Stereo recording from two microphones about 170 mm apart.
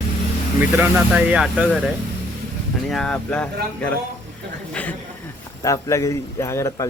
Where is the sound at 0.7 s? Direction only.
10° right (ahead or behind); by 5.0 s 10° left (ahead or behind).